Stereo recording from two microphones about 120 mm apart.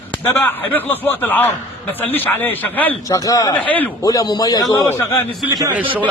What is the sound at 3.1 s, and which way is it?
Speech, 30° left (ahead or behind).